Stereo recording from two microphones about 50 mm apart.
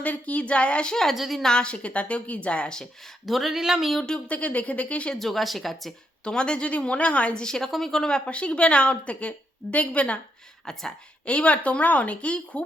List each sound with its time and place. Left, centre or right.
0.0 s a woman's voice: left
1.1 s speech: centre
1.4 s a woman's voice: centre
3.2 s speech: centre
4.3 s a woman's voice: left
5.2 s speech: centre
6.2 s a woman's voice: centre
7.4 s a woman's voice: centre; by 10.2 s left
10.7 s a woman's voice: centre
11.3 s a woman's voice: left